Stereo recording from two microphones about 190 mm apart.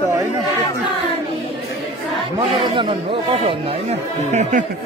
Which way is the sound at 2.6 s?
25° right (ahead or behind).